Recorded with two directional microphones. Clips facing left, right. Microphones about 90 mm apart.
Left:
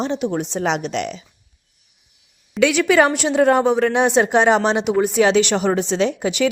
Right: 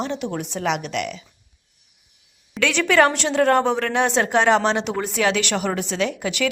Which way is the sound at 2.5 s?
15° left (ahead or behind).